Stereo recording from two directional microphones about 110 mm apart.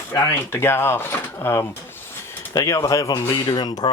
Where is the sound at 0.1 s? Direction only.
25° left (ahead or behind).